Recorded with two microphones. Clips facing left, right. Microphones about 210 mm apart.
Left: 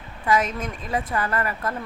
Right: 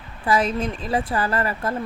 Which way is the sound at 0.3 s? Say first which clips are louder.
Right 2 dB; 30° right (ahead or behind).